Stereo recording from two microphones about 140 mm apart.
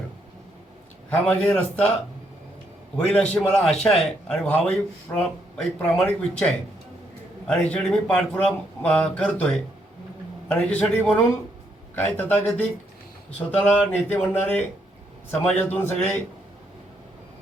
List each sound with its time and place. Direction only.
1.1 s speech: 10° left (ahead or behind)
3.1 s a man's voice: 5° left (ahead or behind)
10.5 s speech: 15° left (ahead or behind)